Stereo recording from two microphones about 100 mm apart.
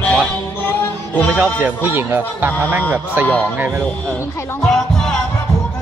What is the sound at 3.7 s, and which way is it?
Speech, 5° left (ahead or behind).